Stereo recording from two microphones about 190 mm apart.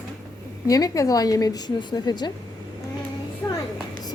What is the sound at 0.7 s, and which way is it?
A woman's voice, 20° left (ahead or behind).